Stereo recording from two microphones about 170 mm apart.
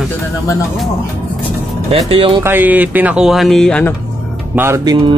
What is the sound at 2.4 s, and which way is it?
Speech, 10° right (ahead or behind).